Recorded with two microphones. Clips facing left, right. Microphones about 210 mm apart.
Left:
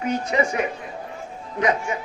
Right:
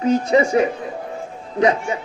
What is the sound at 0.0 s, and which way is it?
A man's voice, 30° right (ahead or behind).